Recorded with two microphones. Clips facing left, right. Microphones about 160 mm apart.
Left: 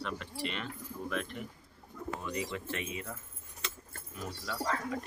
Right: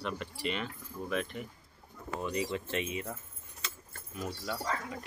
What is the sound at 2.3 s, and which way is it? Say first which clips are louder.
Speech: right 5 dB; 25° right (ahead or behind).